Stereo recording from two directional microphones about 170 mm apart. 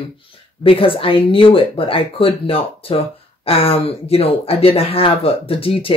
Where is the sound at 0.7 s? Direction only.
30° left (ahead or behind).